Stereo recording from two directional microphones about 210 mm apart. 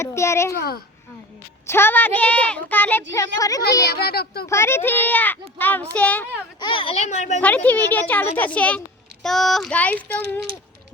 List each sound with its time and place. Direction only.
0.0 s a woman's voice: 15° left (ahead or behind)
0.5 s a child's voice: 45° left (ahead or behind)
1.6 s a woman's voice: 10° left (ahead or behind)
3.9 s a child's voice: 45° left (ahead or behind)
4.4 s a woman's voice: 10° left (ahead or behind)
6.6 s a child's voice: 25° left (ahead or behind)
7.4 s a woman's voice: 5° left (ahead or behind)